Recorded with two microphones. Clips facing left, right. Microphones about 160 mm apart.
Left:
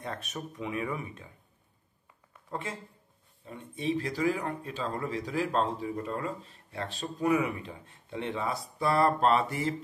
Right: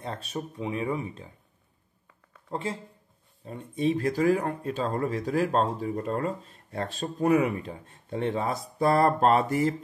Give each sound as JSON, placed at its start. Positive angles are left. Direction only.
{"t": 0.0, "sound": "speech", "side_deg": -30}
{"t": 2.5, "sound": "speech", "side_deg": -30}